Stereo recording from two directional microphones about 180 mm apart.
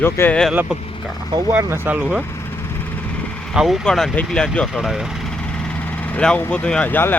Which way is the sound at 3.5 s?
Centre (ahead or behind).